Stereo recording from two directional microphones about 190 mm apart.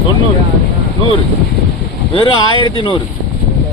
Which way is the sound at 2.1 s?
25° left (ahead or behind).